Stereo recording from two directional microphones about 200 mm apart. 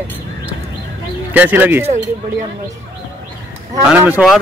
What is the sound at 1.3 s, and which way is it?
Speech, 10° right (ahead or behind).